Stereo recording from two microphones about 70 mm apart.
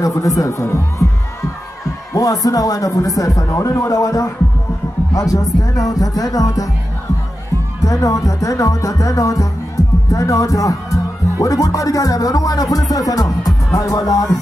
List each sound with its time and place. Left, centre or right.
0.0 s speech: left
2.1 s speech: left
7.8 s speech: left
9.8 s music: left
10.1 s speech: left